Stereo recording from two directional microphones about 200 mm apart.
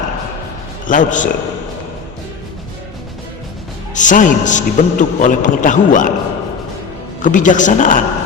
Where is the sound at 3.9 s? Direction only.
40° left (ahead or behind).